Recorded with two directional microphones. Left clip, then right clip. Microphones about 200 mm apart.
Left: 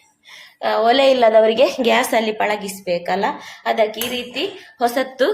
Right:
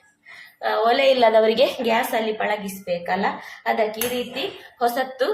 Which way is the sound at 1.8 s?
40° left (ahead or behind).